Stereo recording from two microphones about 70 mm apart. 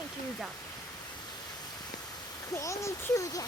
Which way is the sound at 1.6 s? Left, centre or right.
Left.